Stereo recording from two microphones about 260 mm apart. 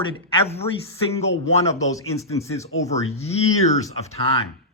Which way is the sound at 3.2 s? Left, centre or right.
Left.